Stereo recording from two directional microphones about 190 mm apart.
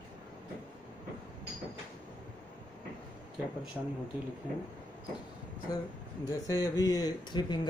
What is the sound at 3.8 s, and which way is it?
Speech, 5° right (ahead or behind).